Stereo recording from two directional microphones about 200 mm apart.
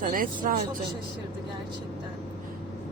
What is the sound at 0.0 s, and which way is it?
Speech, 45° right (ahead or behind).